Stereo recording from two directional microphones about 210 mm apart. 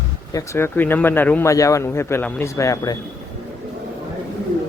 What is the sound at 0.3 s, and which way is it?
A man's voice, 10° left (ahead or behind).